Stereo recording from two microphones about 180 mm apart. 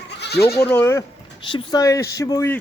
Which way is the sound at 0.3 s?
15° left (ahead or behind).